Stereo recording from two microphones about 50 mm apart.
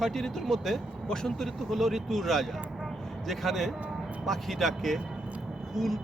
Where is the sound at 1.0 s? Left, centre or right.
Centre.